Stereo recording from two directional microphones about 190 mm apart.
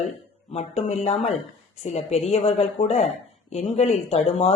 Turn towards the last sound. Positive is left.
turn(degrees=35)  # may be behind; listen again after turning